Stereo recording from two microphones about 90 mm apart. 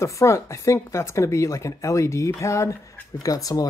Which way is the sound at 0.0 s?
35° left (ahead or behind).